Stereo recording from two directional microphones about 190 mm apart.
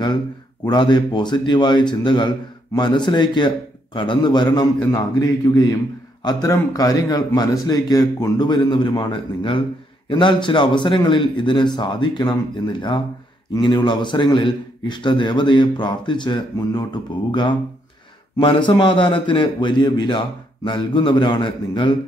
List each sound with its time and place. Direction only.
0.7 s speech: 25° left (ahead or behind)